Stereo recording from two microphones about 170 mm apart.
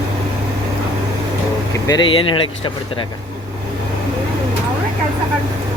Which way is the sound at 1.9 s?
30° left (ahead or behind).